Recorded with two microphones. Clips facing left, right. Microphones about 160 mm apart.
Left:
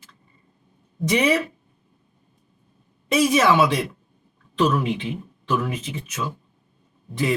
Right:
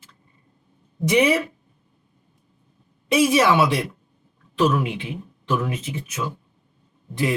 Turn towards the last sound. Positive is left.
turn(degrees=-15)  # may be behind; listen again after turning